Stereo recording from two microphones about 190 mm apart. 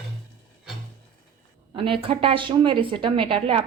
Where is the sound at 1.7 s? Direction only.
25° right (ahead or behind).